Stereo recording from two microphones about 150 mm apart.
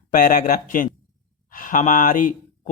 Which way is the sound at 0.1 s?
60° left (ahead or behind).